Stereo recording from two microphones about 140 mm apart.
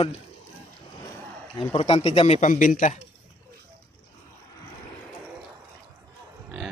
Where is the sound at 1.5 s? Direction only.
45° left (ahead or behind); by 3.0 s 65° left (ahead or behind).